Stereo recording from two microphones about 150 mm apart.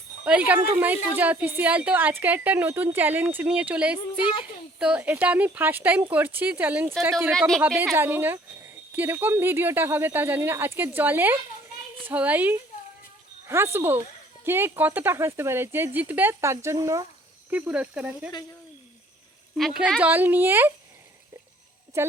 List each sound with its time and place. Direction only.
0.3 s a woman's voice: 10° right (ahead or behind)
7.3 s speech: centre (ahead or behind)
7.9 s a woman's voice: 15° right (ahead or behind)
13.7 s a woman's voice: 15° right (ahead or behind)
17.5 s a woman's voice: 10° right (ahead or behind)
19.5 s a woman's voice: centre (ahead or behind)